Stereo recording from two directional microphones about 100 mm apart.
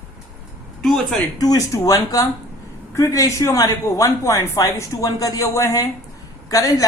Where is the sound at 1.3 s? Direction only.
40° left (ahead or behind).